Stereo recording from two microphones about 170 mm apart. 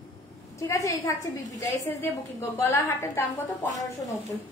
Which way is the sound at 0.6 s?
20° left (ahead or behind).